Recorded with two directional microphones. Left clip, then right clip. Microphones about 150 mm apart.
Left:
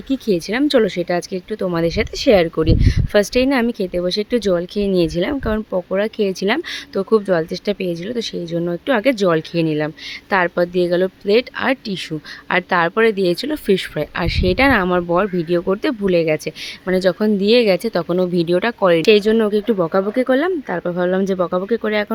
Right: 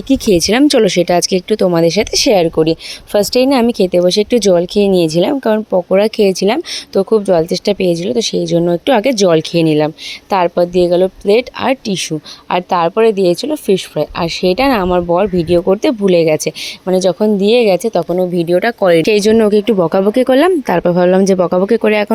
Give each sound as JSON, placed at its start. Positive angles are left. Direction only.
{"t": 0.1, "sound": "speech", "side_deg": -45}
{"t": 2.6, "sound": "speech", "side_deg": -20}
{"t": 5.9, "sound": "speech", "side_deg": -35}
{"t": 10.3, "sound": "speech", "side_deg": -20}
{"t": 16.9, "sound": "speech", "side_deg": -20}
{"t": 18.8, "sound": "speech", "side_deg": -30}
{"t": 19.0, "sound": "speech", "side_deg": -40}